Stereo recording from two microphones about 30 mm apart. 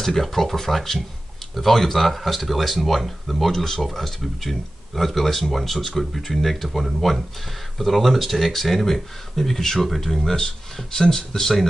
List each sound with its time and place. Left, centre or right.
0.0 s speech: centre
3.5 s speech: centre